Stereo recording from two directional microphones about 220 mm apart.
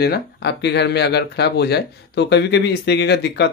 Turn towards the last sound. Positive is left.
turn(degrees=50)  # may be behind; listen again after turning